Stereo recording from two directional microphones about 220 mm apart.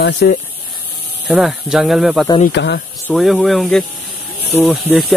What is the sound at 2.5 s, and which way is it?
Speech, 50° left (ahead or behind).